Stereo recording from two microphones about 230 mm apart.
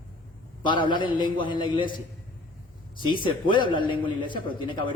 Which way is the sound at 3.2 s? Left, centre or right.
Left.